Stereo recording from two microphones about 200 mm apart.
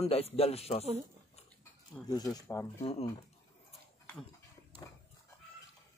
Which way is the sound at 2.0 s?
20° left (ahead or behind).